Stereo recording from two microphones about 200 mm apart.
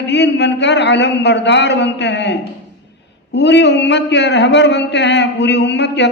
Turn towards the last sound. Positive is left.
turn(degrees=60)  # may be behind; listen again after turning